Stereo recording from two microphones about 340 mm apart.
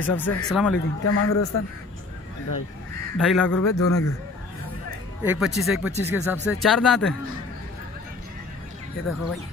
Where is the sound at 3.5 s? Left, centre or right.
Left.